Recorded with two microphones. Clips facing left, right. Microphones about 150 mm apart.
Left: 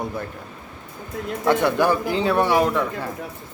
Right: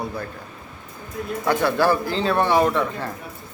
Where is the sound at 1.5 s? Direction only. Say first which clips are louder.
Left 1 dB; 20° left (ahead or behind).